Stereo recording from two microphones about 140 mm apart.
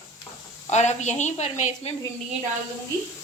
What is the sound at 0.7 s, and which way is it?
Speech, 55° left (ahead or behind).